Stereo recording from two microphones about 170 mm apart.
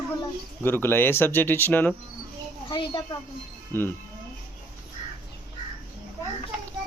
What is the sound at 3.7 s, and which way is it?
Speech, 15° left (ahead or behind).